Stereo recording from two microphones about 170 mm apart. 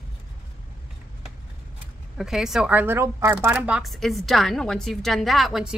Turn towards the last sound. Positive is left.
turn(degrees=0)  # may be behind; listen again after turning